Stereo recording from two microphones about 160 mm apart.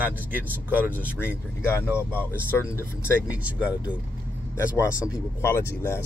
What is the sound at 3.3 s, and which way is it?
Speech, 10° right (ahead or behind).